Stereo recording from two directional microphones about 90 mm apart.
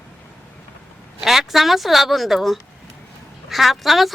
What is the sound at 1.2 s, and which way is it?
A woman's voice, 5° right (ahead or behind).